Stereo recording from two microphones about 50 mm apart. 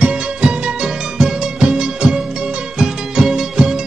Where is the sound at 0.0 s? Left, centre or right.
Centre.